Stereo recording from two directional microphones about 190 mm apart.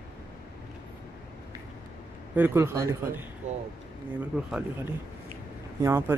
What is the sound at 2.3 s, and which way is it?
Speech, 10° right (ahead or behind).